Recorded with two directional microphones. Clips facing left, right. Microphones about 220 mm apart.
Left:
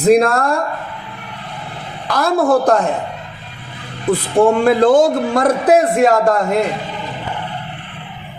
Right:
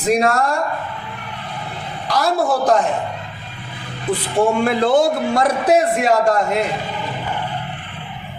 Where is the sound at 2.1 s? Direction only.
55° left (ahead or behind).